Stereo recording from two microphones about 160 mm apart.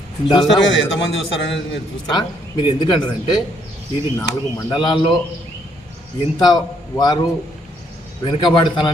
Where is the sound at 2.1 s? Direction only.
30° left (ahead or behind).